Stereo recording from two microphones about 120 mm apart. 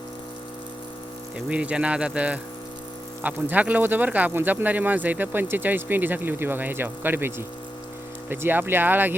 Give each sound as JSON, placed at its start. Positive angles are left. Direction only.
{"t": 1.5, "sound": "speech", "side_deg": -10}